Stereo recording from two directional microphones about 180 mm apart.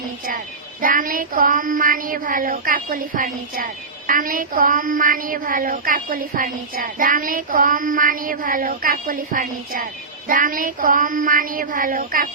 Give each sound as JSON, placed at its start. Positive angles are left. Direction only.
{"t": 0.3, "sound": "child singing", "side_deg": -50}